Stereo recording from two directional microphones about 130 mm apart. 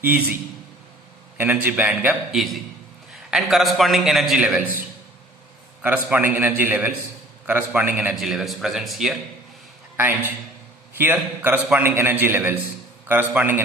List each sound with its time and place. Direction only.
0.0 s a man's voice: 15° right (ahead or behind)
1.4 s a man's voice: 10° right (ahead or behind)
5.8 s a man's voice: 10° right (ahead or behind)
10.0 s a man's voice: 15° right (ahead or behind)